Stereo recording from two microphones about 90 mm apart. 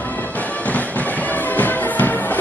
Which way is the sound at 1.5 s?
20° left (ahead or behind).